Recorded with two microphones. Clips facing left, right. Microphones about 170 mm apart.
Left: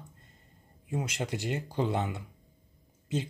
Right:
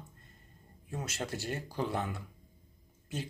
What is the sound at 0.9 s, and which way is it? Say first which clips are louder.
Speech: left 4 dB; 15° left (ahead or behind).